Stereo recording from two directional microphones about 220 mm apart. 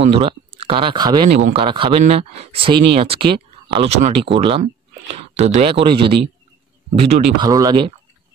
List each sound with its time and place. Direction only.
0.1 s speech: 25° right (ahead or behind)